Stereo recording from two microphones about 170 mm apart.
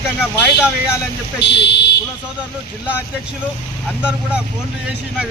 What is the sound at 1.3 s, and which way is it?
Speech, 90° left.